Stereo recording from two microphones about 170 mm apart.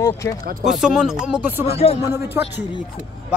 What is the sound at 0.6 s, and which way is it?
Speech, centre (ahead or behind).